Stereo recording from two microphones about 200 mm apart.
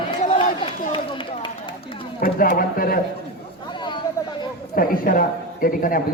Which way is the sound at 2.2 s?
45° left (ahead or behind).